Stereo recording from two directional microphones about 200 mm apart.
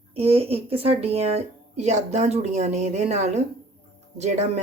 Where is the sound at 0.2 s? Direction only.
30° right (ahead or behind).